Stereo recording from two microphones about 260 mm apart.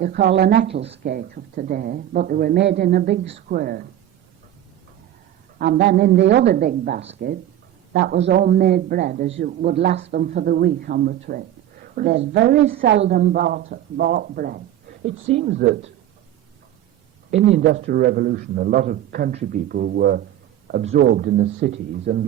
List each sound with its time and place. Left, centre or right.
0.0 s speech: right
5.5 s speech: right
15.0 s speech: right
15.4 s speech: right
17.5 s speech: right